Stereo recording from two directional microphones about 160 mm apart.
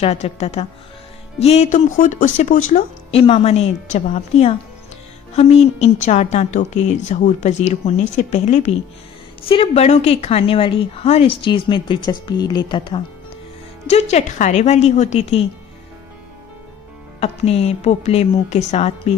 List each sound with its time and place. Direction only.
0.0 s speech: 40° left (ahead or behind)
3.1 s speech: 35° left (ahead or behind)
9.4 s speech: 35° left (ahead or behind)
13.8 s speech: 45° left (ahead or behind)
17.2 s speech: 40° left (ahead or behind)